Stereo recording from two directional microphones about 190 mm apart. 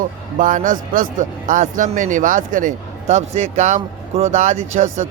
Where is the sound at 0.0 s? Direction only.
45° right (ahead or behind).